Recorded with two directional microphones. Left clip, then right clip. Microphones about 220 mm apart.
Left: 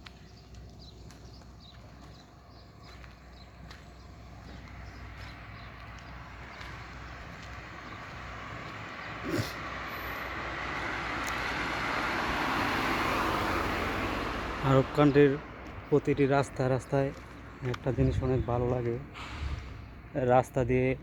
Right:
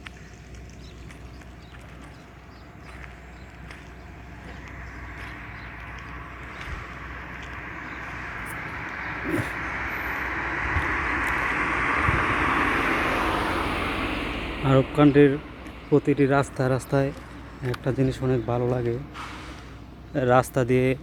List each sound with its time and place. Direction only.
5.3 s vehicle: 55° left (ahead or behind); by 14.7 s 35° left (ahead or behind)
14.9 s speech: centre (ahead or behind)
15.4 s a sound: 30° left (ahead or behind)
15.9 s speech: centre (ahead or behind)
19.1 s a sound: 30° right (ahead or behind)
20.1 s speech: centre (ahead or behind)